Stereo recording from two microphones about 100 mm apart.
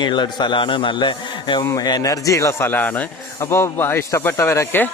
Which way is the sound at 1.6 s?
40° left (ahead or behind).